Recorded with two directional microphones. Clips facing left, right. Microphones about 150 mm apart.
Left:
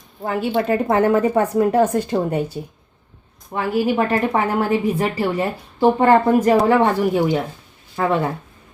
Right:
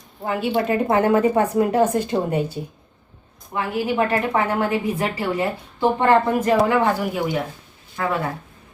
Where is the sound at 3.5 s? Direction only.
20° left (ahead or behind).